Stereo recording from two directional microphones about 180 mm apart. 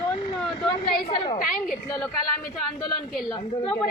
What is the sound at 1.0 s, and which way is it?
Speech, 25° left (ahead or behind).